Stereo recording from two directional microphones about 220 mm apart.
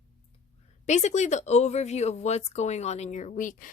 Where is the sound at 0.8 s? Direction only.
30° left (ahead or behind).